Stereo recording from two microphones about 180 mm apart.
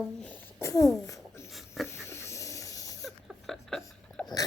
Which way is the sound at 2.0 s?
15° left (ahead or behind).